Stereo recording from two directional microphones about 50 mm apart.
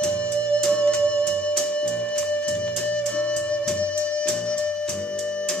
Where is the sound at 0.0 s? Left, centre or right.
Centre.